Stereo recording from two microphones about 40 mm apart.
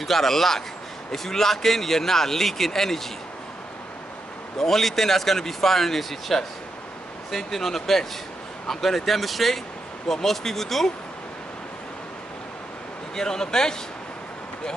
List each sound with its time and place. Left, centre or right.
0.0 s speech: centre
4.6 s speech: centre
13.1 s speech: centre